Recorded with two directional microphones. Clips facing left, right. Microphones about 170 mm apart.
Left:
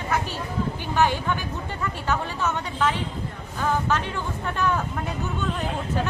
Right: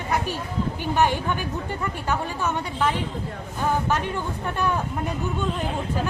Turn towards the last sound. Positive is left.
turn(degrees=-15)  # may be behind; listen again after turning